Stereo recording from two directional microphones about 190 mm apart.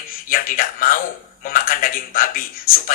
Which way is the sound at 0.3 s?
45° left (ahead or behind).